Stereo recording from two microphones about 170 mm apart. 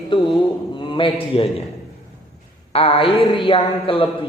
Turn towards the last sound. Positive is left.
turn(degrees=30)  # may be behind; listen again after turning